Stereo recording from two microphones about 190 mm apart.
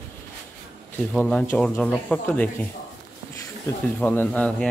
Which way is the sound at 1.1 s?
5° left (ahead or behind).